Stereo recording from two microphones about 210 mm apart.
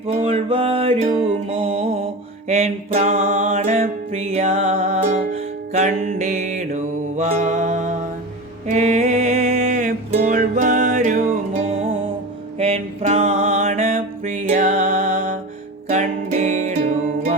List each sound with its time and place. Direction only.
0.1 s music: 30° right (ahead or behind)